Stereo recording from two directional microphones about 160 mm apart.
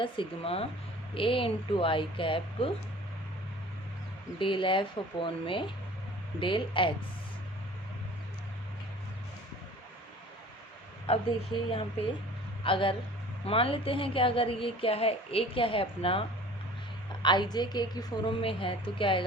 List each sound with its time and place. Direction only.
0.0 s a woman's voice: 35° left (ahead or behind)
4.4 s a woman's voice: 30° left (ahead or behind)
11.1 s a woman's voice: 35° left (ahead or behind)
12.6 s a woman's voice: 35° left (ahead or behind)
17.2 s a woman's voice: 25° left (ahead or behind)